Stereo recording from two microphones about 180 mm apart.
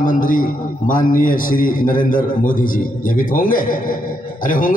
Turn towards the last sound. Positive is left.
turn(degrees=50)  # may be behind; listen again after turning